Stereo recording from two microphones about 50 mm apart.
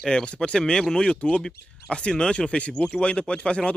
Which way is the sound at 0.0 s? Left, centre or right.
Centre.